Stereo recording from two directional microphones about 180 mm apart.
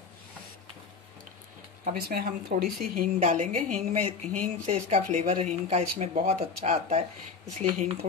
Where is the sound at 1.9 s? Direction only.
55° right (ahead or behind).